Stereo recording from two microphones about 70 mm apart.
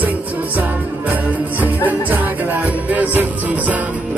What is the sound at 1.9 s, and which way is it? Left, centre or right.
Music, right.